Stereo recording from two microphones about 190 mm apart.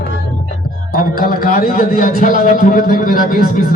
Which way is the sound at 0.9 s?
50° left (ahead or behind).